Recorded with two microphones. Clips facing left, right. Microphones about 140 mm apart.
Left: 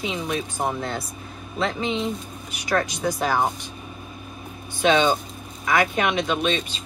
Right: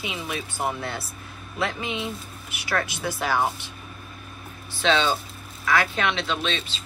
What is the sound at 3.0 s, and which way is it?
Speech, 20° left (ahead or behind).